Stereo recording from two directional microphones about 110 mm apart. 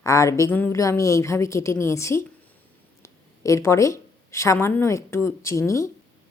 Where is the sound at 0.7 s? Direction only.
30° left (ahead or behind).